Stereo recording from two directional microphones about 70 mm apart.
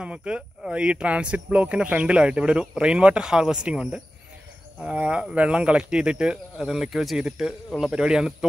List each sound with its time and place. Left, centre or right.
0.0 s speech: centre